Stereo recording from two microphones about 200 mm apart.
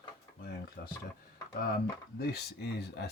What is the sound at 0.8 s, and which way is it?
Speech, 55° left (ahead or behind).